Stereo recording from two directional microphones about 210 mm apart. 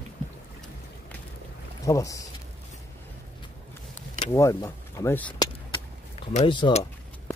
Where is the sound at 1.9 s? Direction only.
15° left (ahead or behind).